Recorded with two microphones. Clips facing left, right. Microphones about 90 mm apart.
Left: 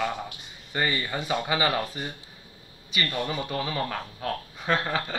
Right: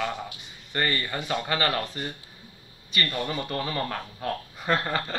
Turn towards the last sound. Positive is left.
turn(degrees=0)  # may be behind; listen again after turning